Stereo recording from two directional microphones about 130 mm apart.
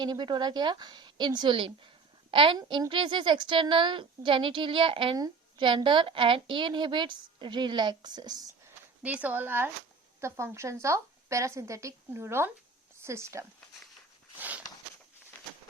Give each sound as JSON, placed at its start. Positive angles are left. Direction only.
{"t": 0.0, "sound": "a woman's voice", "side_deg": -35}
{"t": 9.0, "sound": "speech", "side_deg": -10}
{"t": 14.3, "sound": "walk", "side_deg": -10}